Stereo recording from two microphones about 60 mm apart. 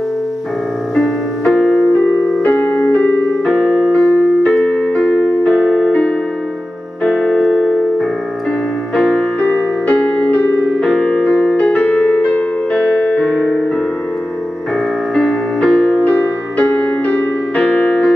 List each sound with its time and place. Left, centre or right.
0.9 s music: centre
2.8 s keyboard: left
3.4 s keyboard: centre
7.0 s music: centre
15.1 s music: centre